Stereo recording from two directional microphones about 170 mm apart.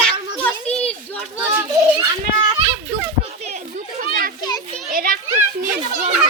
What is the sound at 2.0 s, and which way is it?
Children playing, 25° right (ahead or behind).